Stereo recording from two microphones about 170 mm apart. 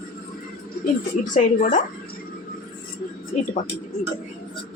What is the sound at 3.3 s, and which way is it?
Speech, 45° left (ahead or behind).